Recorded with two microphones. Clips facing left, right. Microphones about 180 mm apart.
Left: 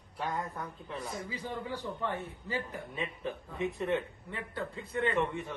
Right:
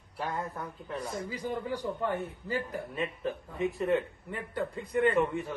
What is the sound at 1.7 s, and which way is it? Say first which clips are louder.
Speech: right 3 dB; 15° right (ahead or behind).